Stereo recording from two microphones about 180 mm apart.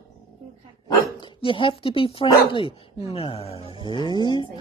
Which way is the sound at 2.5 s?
30° left (ahead or behind).